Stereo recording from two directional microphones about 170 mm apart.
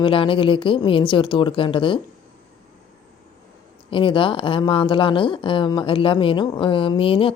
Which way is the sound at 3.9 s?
30° left (ahead or behind).